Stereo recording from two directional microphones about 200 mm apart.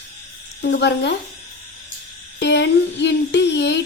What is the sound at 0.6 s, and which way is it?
Speech, 55° left (ahead or behind).